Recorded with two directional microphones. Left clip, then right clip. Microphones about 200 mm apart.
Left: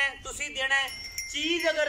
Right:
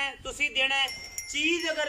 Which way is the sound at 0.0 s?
10° right (ahead or behind).